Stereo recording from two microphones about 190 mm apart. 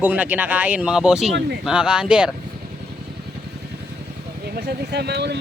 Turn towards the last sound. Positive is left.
turn(degrees=-60)  # may be behind; listen again after turning